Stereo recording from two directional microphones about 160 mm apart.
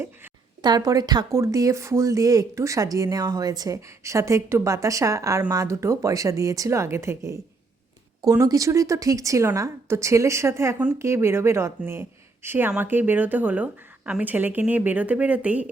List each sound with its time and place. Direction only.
0.6 s speech: 25° right (ahead or behind); by 15.7 s 10° right (ahead or behind)